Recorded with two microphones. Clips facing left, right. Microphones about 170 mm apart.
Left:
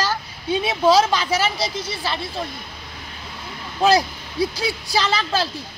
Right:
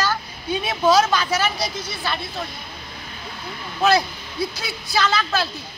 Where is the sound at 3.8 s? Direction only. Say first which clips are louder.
Left 2 dB; 35° left (ahead or behind).